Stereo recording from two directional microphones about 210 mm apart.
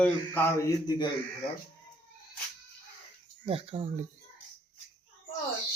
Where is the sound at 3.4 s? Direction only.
25° right (ahead or behind).